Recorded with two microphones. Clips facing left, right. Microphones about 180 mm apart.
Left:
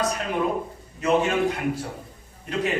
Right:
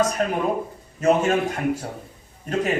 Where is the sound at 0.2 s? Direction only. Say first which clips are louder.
Right 2 dB; 45° right (ahead or behind).